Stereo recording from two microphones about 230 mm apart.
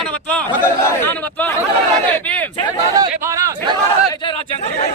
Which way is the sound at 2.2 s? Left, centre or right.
Centre.